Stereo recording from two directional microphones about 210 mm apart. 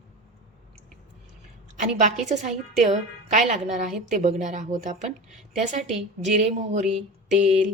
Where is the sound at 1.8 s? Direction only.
35° right (ahead or behind).